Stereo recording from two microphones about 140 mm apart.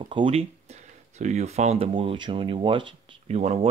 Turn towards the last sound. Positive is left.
turn(degrees=-45)  # may be behind; listen again after turning